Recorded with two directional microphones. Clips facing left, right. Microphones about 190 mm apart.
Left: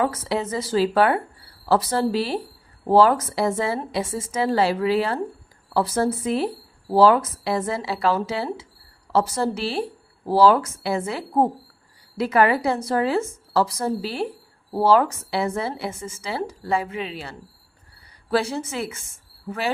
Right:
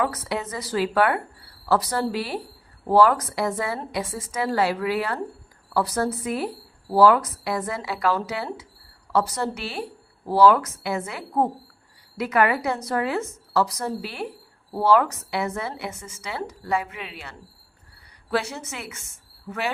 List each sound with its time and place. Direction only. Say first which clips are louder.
0.0 s a woman's voice: left 3 dB; 30° left (ahead or behind)